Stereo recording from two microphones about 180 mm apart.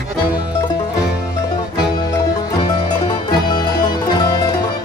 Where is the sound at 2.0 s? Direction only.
25° left (ahead or behind).